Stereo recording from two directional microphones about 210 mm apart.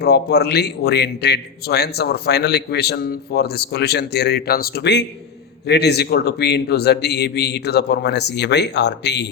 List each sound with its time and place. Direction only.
0.0 s a man's voice: 50° left (ahead or behind)